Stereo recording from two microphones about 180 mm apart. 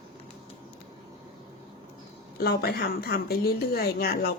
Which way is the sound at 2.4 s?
60° left (ahead or behind).